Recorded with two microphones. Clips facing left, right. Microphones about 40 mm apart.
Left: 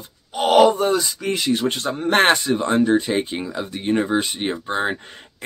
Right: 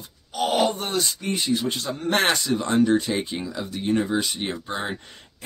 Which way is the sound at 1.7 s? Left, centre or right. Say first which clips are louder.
Left 5 dB; left.